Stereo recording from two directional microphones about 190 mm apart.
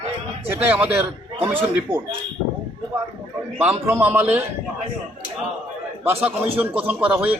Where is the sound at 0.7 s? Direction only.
10° right (ahead or behind).